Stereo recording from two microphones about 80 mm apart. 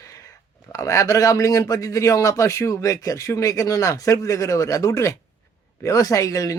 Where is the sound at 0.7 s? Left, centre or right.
Left.